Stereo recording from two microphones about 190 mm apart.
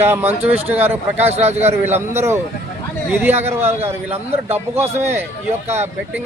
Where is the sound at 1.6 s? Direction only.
10° right (ahead or behind).